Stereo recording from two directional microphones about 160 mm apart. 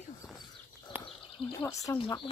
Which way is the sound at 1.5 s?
15° left (ahead or behind).